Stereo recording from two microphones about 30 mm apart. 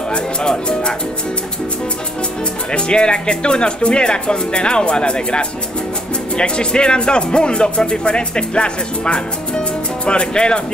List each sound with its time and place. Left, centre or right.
0.1 s speech: left
2.7 s speech: left